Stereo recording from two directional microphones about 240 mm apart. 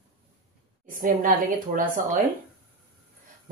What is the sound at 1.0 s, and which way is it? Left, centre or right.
A woman's voice, right.